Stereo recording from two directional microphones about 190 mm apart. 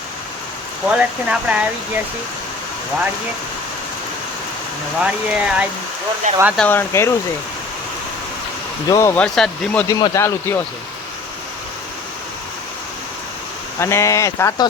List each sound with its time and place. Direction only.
0.9 s speech: 5° right (ahead or behind)
5.3 s speech: 5° right (ahead or behind)
6.3 s speech: 40° right (ahead or behind)
6.6 s speech: 10° left (ahead or behind)
8.9 s speech: 15° left (ahead or behind)
9.9 s speech: 15° left (ahead or behind)
13.7 s speech: 15° left (ahead or behind)